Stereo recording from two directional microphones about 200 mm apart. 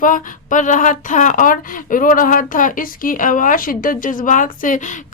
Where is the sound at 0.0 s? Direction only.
40° left (ahead or behind).